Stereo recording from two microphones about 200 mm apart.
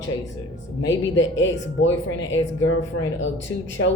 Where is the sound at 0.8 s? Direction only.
65° left (ahead or behind).